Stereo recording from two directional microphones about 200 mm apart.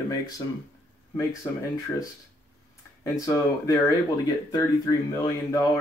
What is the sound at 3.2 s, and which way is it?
Speech, 15° left (ahead or behind).